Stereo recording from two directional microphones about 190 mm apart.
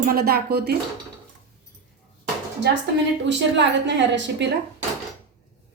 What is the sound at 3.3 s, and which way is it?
A woman's voice, 70° right (ahead or behind).